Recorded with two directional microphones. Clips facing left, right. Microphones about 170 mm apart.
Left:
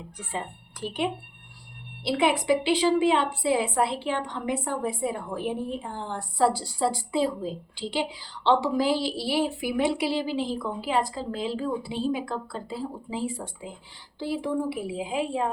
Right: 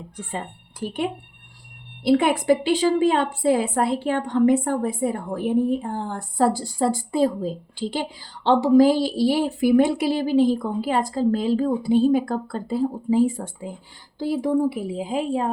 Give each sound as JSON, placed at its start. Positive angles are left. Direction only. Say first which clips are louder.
{"t": 0.2, "sound": "a woman's voice", "louder": "right 2 dB", "side_deg": -50}